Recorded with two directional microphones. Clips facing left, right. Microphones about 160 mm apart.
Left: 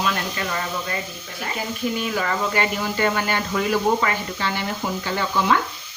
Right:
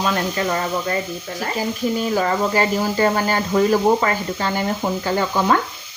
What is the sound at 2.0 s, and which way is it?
Speech, 35° right (ahead or behind).